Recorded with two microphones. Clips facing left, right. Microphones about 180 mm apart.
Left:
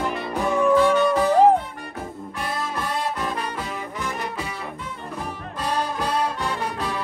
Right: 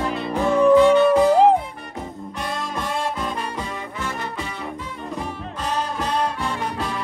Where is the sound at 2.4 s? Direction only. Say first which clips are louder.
Even; 5° left (ahead or behind).